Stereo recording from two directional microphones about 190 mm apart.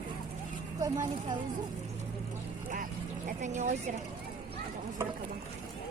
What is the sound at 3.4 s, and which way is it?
Speech, 40° right (ahead or behind).